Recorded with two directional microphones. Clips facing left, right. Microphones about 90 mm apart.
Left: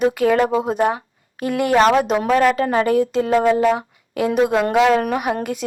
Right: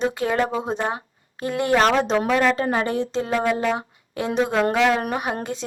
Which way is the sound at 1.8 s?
5° left (ahead or behind).